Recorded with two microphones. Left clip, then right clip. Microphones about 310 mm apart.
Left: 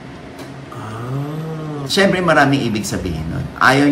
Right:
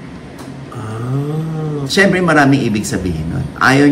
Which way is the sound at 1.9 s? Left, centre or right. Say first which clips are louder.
Right 2 dB; centre.